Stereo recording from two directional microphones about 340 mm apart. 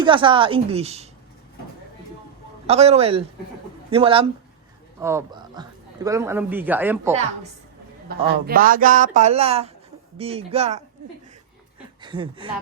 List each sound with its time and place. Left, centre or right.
0.0 s speech: centre
2.6 s speech: centre
8.1 s speech: right
12.0 s speech: centre